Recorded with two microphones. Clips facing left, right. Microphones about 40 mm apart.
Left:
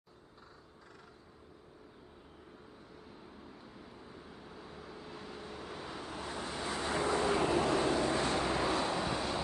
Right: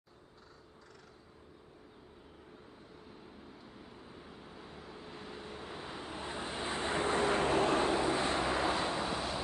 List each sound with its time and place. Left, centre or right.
3.8 s vehicle: centre; by 9.0 s right
9.0 s train: centre